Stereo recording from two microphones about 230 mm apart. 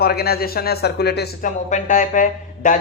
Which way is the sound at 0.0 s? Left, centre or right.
Left.